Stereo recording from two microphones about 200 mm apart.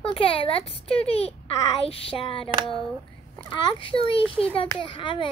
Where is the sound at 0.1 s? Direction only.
25° left (ahead or behind).